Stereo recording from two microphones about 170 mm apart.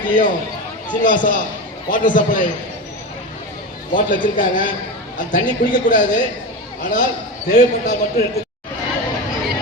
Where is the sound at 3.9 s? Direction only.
50° left (ahead or behind).